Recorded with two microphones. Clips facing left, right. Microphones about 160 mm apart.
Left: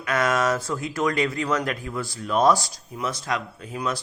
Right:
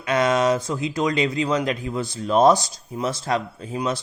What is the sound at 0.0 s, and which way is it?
Speech, 20° right (ahead or behind).